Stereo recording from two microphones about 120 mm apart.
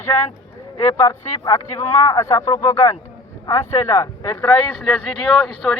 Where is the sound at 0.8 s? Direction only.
25° left (ahead or behind).